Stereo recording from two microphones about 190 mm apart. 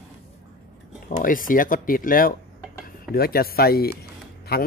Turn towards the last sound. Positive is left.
turn(degrees=55)  # may be behind; listen again after turning